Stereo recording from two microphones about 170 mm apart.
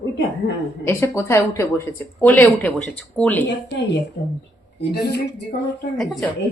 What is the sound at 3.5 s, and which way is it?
Speech, 90° left.